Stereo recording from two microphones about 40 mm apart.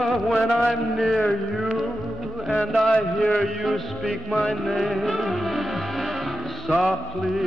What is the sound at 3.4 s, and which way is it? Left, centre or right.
Music, centre.